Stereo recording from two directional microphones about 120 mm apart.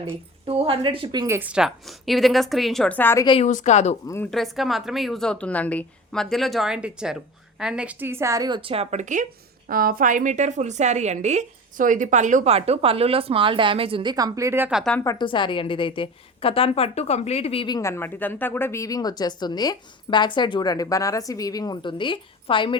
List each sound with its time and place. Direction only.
0.0 s a woman's voice: 55° right (ahead or behind)
1.4 s a woman's voice: 10° right (ahead or behind)
3.0 s a woman's voice: 20° left (ahead or behind)
3.4 s speech: 90° left; by 3.9 s 70° left (ahead or behind)
4.0 s a woman's voice: 25° left (ahead or behind)
4.3 s a woman's voice: centre (ahead or behind); by 8.4 s 25° right (ahead or behind)
8.4 s speech: 40° right (ahead or behind)
8.7 s a woman's voice: 65° right (ahead or behind); by 14.7 s 20° right (ahead or behind)
15.2 s a woman's voice: 45° left (ahead or behind)
17.7 s speech: 25° left (ahead or behind); by 22.8 s 45° left (ahead or behind)